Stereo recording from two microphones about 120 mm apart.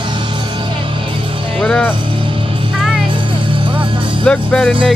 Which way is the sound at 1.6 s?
10° left (ahead or behind).